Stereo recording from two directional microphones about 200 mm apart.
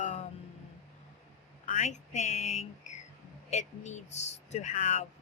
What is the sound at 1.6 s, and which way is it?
A woman's voice, 35° left (ahead or behind).